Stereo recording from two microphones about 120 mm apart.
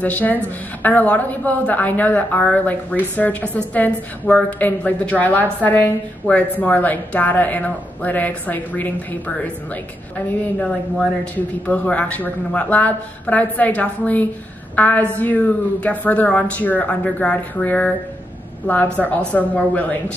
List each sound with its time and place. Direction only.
0.0 s a woman's voice: 15° left (ahead or behind)
11.3 s a woman's voice: 15° left (ahead or behind)
18.9 s a woman's voice: 10° left (ahead or behind)